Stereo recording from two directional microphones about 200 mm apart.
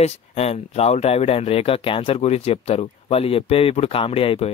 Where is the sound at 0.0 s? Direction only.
30° left (ahead or behind).